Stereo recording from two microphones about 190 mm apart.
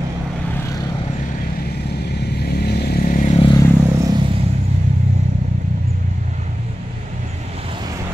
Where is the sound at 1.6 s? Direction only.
60° left (ahead or behind).